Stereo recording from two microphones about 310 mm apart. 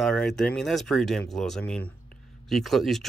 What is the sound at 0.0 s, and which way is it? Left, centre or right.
Speech, centre.